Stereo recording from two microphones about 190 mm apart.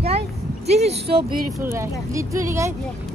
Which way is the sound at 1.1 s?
55° right (ahead or behind).